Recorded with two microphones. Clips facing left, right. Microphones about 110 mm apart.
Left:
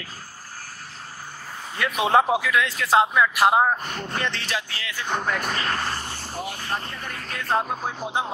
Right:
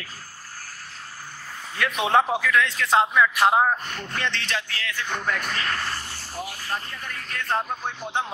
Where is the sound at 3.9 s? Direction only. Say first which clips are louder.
Left 3 dB; 15° left (ahead or behind).